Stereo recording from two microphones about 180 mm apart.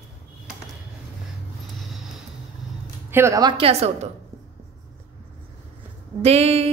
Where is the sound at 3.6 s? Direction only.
35° right (ahead or behind).